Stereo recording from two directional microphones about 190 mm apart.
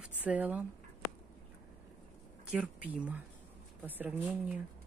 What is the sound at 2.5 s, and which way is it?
Speech, 10° right (ahead or behind).